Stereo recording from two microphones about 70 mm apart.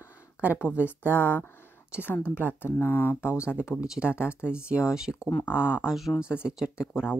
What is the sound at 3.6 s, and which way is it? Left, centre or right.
Speech, centre.